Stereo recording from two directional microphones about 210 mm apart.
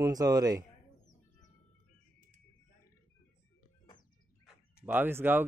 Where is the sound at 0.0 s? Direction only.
15° right (ahead or behind).